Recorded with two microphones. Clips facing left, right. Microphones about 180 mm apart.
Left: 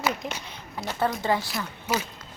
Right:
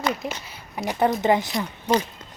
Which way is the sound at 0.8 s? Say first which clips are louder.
Right 5 dB; 20° right (ahead or behind).